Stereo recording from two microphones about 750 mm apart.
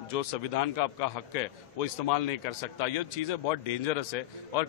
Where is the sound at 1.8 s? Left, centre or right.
Left.